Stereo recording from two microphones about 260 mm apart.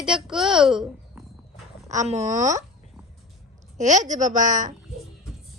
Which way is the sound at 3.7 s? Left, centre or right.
Right.